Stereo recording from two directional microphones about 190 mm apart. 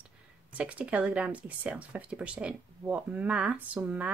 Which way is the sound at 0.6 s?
5° right (ahead or behind).